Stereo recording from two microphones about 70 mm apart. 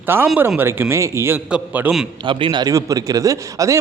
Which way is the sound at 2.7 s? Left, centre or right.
Right.